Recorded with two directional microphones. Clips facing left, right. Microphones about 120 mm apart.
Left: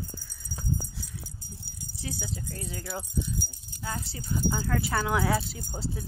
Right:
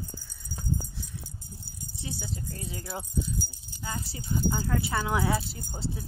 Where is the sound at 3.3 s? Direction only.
60° left (ahead or behind).